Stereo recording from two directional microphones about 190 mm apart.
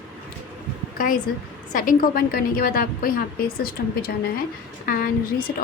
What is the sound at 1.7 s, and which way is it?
A woman's voice, 45° left (ahead or behind).